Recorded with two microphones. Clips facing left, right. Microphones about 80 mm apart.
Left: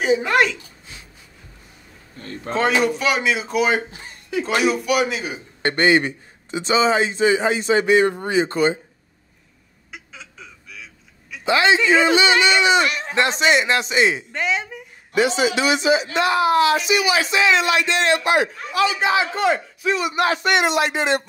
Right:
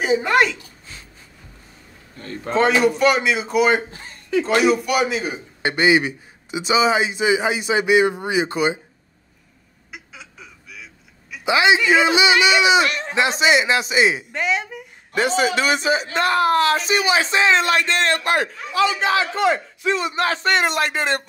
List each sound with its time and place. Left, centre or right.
0.0 s speech: centre
2.5 s a man's voice: centre
9.8 s honk: centre
11.4 s a man's voice: centre
12.8 s speech: centre
15.1 s a man's voice: right
19.0 s a man's voice: left
20.3 s a man's voice: right